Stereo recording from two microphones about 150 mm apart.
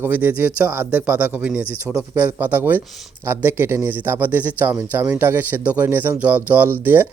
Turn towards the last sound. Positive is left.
turn(degrees=-15)  # may be behind; listen again after turning